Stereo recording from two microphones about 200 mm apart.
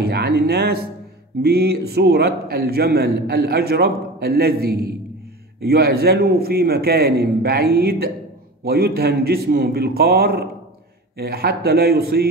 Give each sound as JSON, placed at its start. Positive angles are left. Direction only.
{"t": 0.0, "sound": "music", "side_deg": -50}
{"t": 1.4, "sound": "a man's voice", "side_deg": -50}